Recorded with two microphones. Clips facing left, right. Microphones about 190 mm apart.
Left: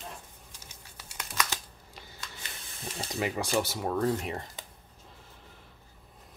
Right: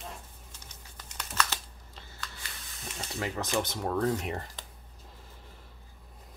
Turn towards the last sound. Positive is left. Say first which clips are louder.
# even
turn(degrees=0)  # may be behind; listen again after turning